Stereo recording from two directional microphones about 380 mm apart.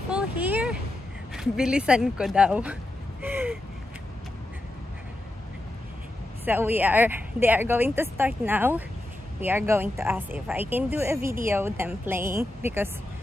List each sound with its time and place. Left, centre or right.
0.1 s a sound: centre
1.3 s speech: centre
6.4 s a woman's voice: centre